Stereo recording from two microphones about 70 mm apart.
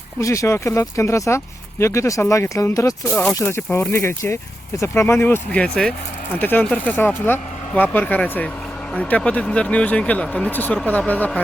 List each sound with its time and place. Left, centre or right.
0.2 s speech: left
5.5 s speech: centre
6.4 s speech: left